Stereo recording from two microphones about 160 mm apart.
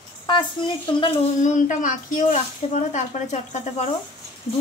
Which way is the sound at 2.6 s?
40° left (ahead or behind).